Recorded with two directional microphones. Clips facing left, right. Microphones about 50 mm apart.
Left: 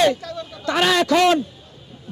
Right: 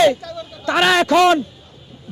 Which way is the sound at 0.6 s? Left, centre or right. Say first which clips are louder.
Right 3 dB; right.